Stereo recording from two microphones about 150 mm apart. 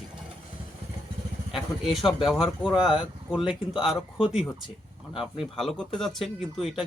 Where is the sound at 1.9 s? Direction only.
Centre (ahead or behind).